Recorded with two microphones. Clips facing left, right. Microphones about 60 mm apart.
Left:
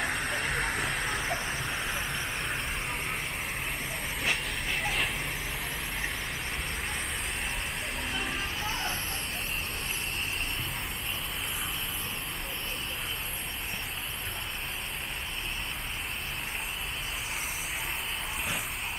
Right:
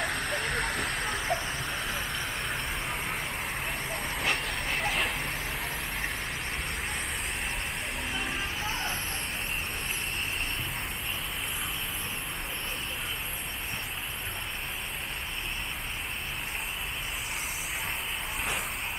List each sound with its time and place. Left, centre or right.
0.0 s vehicle: centre
1.9 s vehicle: centre
2.4 s a sound: centre
3.9 s vehicle: centre
8.1 s music: centre